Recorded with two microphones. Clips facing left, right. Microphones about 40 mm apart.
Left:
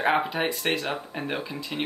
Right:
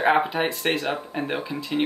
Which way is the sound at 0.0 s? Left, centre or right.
Centre.